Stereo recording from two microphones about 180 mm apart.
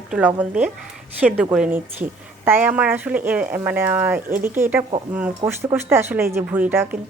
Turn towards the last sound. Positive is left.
turn(degrees=-10)  # may be behind; listen again after turning